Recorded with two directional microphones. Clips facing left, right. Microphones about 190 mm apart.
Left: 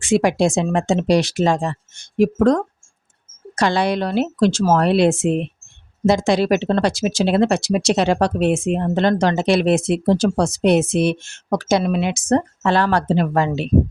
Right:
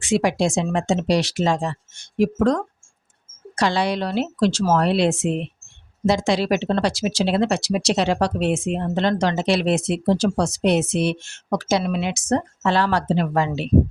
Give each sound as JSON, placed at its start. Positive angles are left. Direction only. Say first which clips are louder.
{"t": 0.0, "sound": "speech", "louder": "left 3 dB", "side_deg": 50}